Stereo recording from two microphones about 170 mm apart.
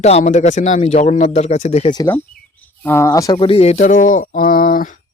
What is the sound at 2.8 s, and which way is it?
Speech, 15° left (ahead or behind).